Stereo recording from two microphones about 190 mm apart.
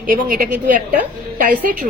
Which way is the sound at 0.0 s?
45° right (ahead or behind).